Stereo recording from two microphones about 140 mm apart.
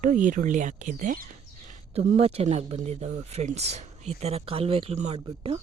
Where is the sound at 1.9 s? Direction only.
50° right (ahead or behind).